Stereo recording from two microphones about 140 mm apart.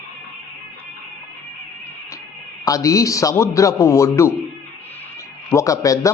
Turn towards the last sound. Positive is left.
turn(degrees=25)  # may be behind; listen again after turning